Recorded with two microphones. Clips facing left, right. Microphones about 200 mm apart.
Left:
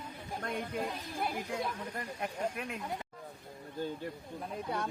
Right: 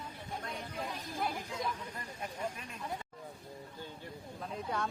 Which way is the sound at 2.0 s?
65° left (ahead or behind).